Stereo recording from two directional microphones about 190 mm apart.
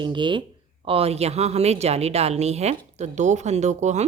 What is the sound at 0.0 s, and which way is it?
A woman's voice, 25° right (ahead or behind).